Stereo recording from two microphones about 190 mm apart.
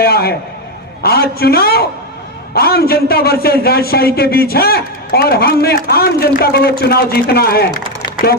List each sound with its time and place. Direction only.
0.0 s speech: 55° left (ahead or behind)